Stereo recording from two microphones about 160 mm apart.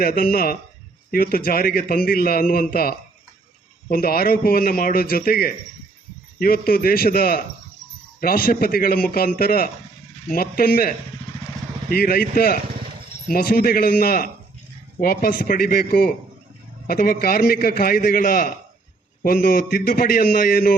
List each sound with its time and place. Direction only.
0.0 s a man's voice: 70° left (ahead or behind)